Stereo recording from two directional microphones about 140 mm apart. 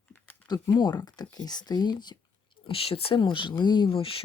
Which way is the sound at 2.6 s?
40° left (ahead or behind).